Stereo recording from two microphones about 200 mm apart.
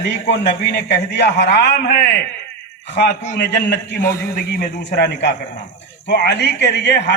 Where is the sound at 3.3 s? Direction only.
60° left (ahead or behind).